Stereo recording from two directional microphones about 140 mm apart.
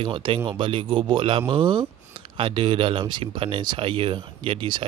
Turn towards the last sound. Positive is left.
turn(degrees=-40)  # may be behind; listen again after turning